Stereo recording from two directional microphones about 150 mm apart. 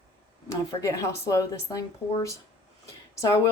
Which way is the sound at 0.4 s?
20° left (ahead or behind).